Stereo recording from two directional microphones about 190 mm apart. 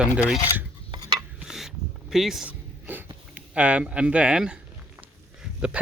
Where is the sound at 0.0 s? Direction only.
5° right (ahead or behind).